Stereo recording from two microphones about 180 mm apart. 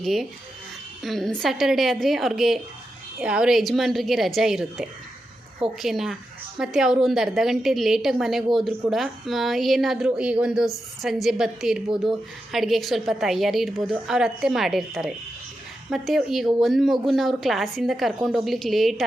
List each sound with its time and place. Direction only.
0.0 s a woman's voice: centre (ahead or behind)